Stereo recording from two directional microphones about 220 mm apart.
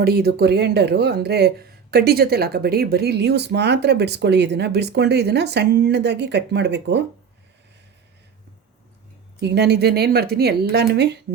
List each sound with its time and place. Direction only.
0.0 s speech: 45° right (ahead or behind)
9.4 s speech: 50° right (ahead or behind)